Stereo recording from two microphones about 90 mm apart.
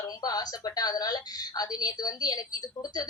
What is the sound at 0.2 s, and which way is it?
A woman's voice, 45° left (ahead or behind).